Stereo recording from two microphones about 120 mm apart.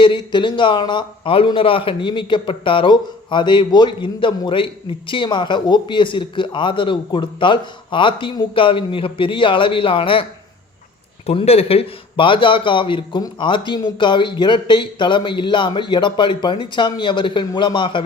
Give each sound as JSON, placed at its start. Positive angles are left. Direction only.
{"t": 0.0, "sound": "a man's voice", "side_deg": 40}
{"t": 11.3, "sound": "speech", "side_deg": 55}